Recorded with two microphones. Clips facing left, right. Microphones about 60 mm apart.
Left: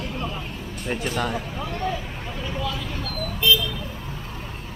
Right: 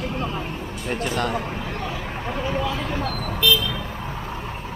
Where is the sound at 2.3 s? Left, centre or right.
Right.